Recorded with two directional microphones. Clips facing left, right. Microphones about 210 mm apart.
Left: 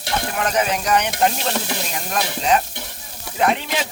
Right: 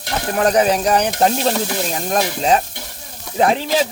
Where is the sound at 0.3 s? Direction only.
35° right (ahead or behind).